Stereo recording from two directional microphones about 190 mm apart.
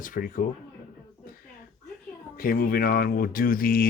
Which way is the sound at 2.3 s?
50° left (ahead or behind).